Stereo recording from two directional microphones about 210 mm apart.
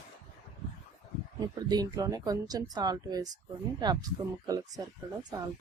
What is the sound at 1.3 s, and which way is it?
Speech, 20° right (ahead or behind).